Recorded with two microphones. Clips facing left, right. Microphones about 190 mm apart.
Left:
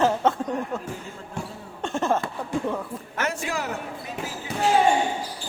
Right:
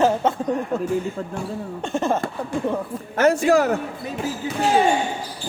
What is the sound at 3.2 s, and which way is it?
Speech, 40° right (ahead or behind).